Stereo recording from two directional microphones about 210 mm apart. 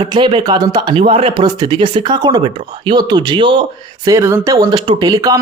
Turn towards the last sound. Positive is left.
turn(degrees=-20)  # may be behind; listen again after turning